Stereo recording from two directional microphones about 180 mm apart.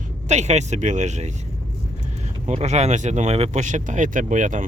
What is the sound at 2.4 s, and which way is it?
Speech, 40° right (ahead or behind).